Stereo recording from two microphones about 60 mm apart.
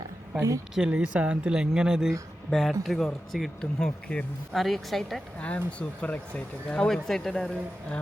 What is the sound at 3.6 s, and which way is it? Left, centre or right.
Speech, centre.